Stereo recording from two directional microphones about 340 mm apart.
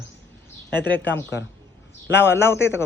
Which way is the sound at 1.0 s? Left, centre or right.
Left.